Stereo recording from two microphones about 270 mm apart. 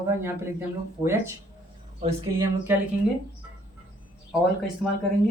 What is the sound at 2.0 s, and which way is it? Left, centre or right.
Speech, right.